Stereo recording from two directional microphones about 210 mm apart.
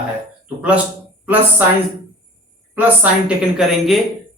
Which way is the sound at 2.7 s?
5° right (ahead or behind).